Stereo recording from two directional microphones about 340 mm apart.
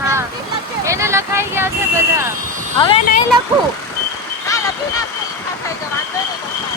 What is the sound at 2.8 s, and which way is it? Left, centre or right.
Speech, centre.